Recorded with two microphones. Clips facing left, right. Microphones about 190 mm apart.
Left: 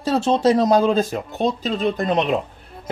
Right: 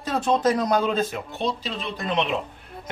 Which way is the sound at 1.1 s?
45° left (ahead or behind).